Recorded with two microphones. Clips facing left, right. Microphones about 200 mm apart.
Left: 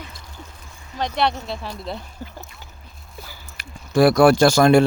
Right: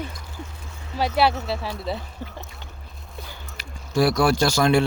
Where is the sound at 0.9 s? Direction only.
5° right (ahead or behind).